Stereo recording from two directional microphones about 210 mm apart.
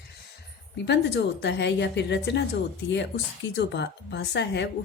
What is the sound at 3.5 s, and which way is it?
A woman's voice, 55° left (ahead or behind).